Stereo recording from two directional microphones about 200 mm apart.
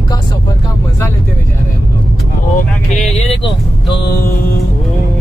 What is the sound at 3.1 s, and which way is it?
Speech, 30° left (ahead or behind).